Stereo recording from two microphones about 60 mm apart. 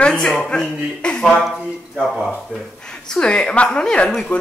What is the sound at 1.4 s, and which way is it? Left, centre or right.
Speech, centre.